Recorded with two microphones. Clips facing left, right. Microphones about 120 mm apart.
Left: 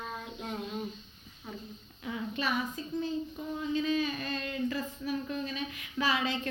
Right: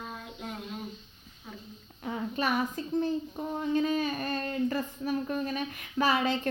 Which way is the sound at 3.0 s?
45° right (ahead or behind).